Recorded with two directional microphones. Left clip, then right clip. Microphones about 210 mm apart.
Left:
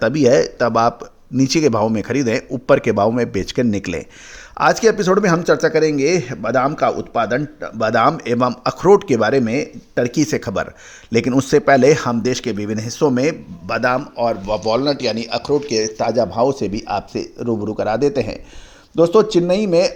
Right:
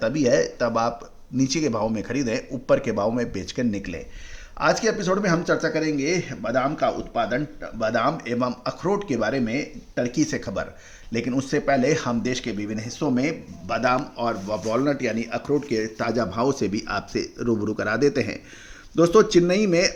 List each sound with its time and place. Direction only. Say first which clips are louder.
0.0 s a man's voice: left 7 dB; 40° left (ahead or behind); by 19.9 s 15° left (ahead or behind)